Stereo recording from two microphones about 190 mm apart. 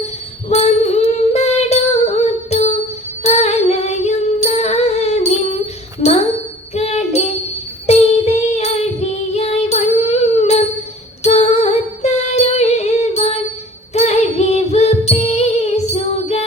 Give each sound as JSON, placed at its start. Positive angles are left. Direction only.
{"t": 0.5, "sound": "child singing", "side_deg": 35}
{"t": 3.2, "sound": "music", "side_deg": 35}
{"t": 6.0, "sound": "a sound", "side_deg": 35}
{"t": 6.7, "sound": "music", "side_deg": 35}
{"t": 7.9, "sound": "female singing", "side_deg": 35}
{"t": 11.2, "sound": "music", "side_deg": 35}
{"t": 13.9, "sound": "female singing", "side_deg": 35}